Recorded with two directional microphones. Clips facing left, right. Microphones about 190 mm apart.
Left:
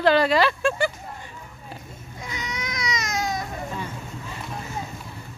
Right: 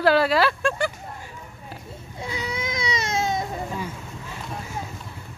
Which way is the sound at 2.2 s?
30° right (ahead or behind).